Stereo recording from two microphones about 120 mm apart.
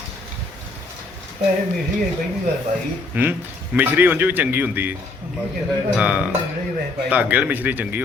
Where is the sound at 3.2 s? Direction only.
15° right (ahead or behind).